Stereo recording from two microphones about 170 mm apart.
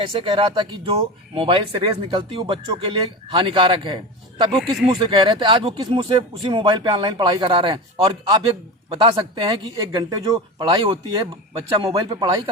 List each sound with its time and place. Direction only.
0.0 s speech: 30° right (ahead or behind)